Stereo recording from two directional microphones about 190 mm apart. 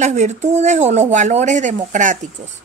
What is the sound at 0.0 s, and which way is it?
A woman's voice, 35° right (ahead or behind).